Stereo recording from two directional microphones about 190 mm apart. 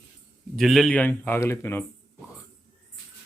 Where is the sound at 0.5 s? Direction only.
Centre (ahead or behind).